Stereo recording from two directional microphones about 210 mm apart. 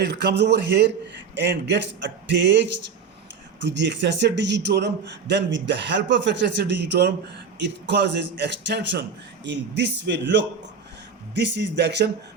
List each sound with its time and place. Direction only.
0.0 s a man's voice: 55° right (ahead or behind)